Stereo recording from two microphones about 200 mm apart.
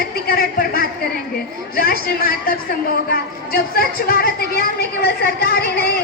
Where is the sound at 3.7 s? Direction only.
50° left (ahead or behind).